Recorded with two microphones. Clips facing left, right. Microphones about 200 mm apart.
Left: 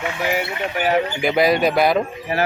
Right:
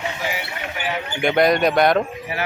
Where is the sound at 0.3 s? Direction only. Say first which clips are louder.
Left 6 dB; 50° left (ahead or behind).